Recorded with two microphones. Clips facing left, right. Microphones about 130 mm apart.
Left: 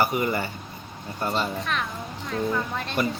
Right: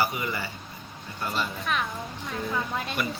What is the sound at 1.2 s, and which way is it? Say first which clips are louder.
Speech: left 4 dB; 30° left (ahead or behind).